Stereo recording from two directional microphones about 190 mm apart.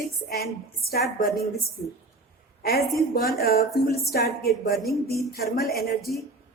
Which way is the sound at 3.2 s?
55° left (ahead or behind).